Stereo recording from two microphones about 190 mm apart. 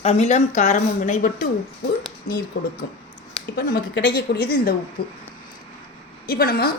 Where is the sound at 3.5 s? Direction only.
65° left (ahead or behind).